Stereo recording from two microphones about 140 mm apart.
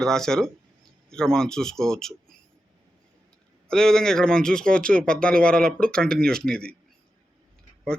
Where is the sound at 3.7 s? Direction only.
5° left (ahead or behind).